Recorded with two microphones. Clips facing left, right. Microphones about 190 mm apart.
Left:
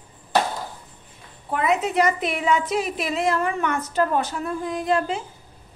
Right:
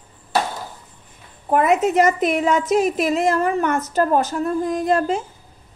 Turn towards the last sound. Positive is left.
turn(degrees=-45)  # may be behind; listen again after turning